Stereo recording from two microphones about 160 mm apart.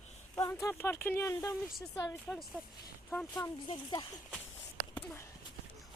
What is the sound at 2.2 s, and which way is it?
Speech, centre (ahead or behind).